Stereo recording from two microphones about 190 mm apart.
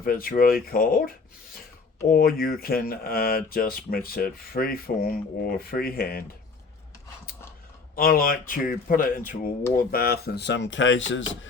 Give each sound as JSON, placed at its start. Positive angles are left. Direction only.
{"t": 0.0, "sound": "speech", "side_deg": 50}
{"t": 7.9, "sound": "speech", "side_deg": 50}